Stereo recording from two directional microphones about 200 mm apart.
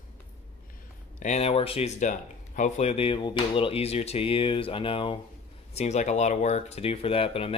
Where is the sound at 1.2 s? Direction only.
35° left (ahead or behind).